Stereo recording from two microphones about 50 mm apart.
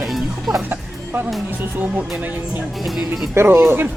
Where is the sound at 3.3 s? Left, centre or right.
Right.